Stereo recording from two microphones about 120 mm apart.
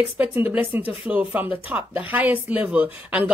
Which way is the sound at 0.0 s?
15° right (ahead or behind).